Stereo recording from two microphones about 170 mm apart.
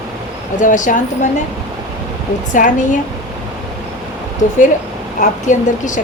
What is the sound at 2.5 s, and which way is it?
Speech, 50° left (ahead or behind).